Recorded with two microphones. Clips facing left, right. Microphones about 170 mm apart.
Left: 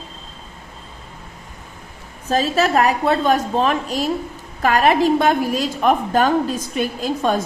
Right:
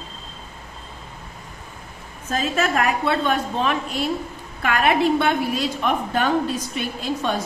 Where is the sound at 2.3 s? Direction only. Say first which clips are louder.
Left 5 dB; 35° left (ahead or behind).